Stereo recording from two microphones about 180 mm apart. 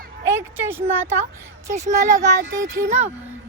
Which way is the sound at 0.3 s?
15° right (ahead or behind).